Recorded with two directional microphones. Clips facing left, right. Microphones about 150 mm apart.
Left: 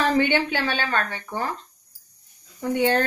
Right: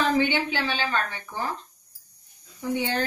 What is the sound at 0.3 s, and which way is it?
Speech, 55° left (ahead or behind).